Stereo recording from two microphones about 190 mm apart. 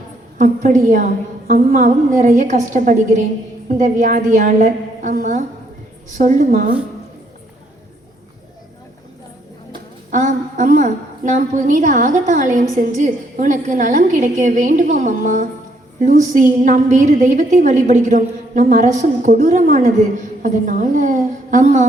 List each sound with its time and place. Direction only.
0.3 s a woman's voice: 45° right (ahead or behind)
10.1 s a woman's voice: 40° right (ahead or behind)